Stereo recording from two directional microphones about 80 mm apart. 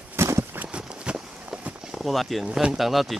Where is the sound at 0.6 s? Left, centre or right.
Centre.